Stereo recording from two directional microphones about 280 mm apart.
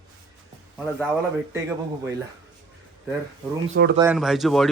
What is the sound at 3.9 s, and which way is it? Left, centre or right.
Speech, centre.